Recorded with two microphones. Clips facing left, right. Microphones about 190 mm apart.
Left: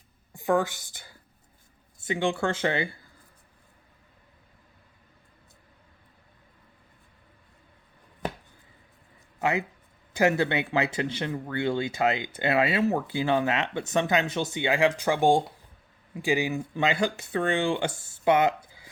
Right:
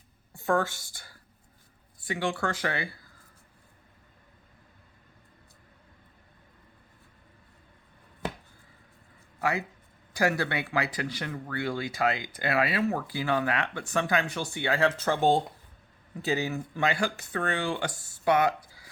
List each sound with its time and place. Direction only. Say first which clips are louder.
0.3 s speech: left 2 dB; 15° left (ahead or behind)
9.4 s speech: left 3 dB; 20° left (ahead or behind)